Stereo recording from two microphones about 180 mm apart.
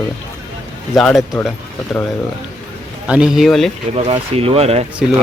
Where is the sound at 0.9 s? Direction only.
Centre (ahead or behind).